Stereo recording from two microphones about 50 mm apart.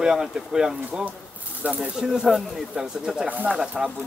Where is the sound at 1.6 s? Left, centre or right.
Right.